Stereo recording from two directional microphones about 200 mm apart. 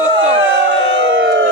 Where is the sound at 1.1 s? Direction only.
60° right (ahead or behind).